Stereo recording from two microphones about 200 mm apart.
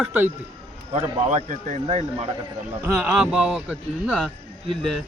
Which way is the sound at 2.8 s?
10° right (ahead or behind).